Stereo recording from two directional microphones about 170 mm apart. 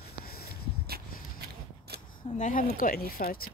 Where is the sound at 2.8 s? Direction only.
55° left (ahead or behind).